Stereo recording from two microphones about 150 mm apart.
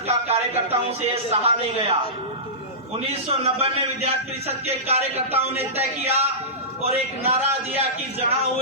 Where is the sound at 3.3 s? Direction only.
40° right (ahead or behind).